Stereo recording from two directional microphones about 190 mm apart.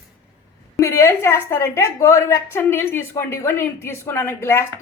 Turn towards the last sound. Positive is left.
turn(degrees=15)  # may be behind; listen again after turning